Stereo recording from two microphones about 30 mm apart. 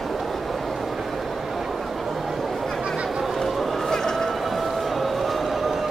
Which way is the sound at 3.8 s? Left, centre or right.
Centre.